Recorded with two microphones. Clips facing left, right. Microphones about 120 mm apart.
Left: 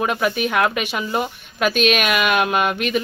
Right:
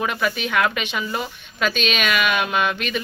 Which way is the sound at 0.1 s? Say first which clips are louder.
Left 3 dB; 50° left (ahead or behind).